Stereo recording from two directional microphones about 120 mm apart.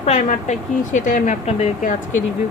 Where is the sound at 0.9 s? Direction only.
90° left.